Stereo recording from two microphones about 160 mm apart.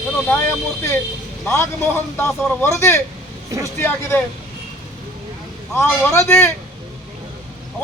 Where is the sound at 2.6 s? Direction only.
20° left (ahead or behind).